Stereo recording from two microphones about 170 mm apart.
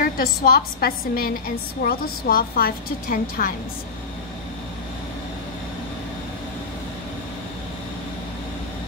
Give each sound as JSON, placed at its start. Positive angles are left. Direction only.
{"t": 0.0, "sound": "a woman's voice", "side_deg": 60}